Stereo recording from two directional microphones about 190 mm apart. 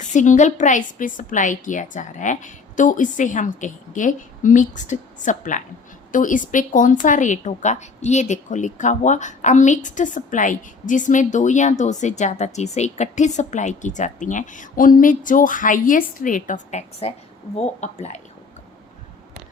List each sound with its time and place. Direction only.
0.1 s speech: 40° left (ahead or behind)